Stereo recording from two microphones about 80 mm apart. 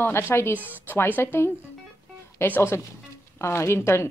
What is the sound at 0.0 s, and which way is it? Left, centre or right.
Speech, left.